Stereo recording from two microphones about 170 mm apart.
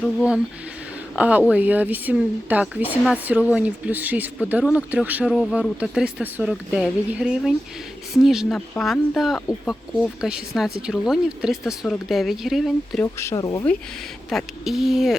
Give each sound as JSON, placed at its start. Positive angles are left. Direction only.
{"t": 1.1, "sound": "speech", "side_deg": -10}
{"t": 13.1, "sound": "speech", "side_deg": 20}
{"t": 14.3, "sound": "speech", "side_deg": 0}